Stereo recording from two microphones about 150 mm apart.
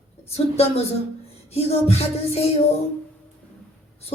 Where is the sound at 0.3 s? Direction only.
45° left (ahead or behind).